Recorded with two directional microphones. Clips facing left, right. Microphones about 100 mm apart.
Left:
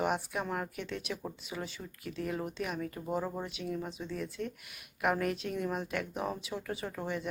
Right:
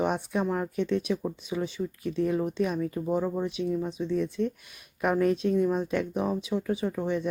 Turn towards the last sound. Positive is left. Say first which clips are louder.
# right 8 dB
turn(degrees=-20)  # may be behind; listen again after turning